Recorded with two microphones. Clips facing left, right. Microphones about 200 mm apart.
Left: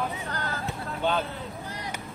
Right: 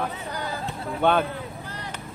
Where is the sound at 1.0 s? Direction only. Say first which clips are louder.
Right 6 dB; 60° right (ahead or behind).